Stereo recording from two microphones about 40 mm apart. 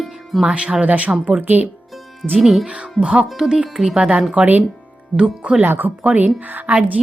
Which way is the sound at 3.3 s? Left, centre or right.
Centre.